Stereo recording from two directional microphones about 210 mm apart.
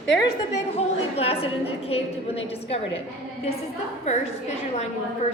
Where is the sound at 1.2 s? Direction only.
30° left (ahead or behind).